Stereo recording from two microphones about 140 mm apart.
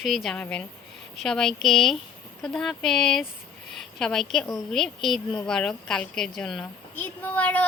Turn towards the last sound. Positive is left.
turn(degrees=10)  # may be behind; listen again after turning